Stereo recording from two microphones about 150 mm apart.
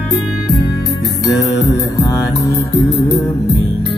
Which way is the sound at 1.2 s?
25° left (ahead or behind).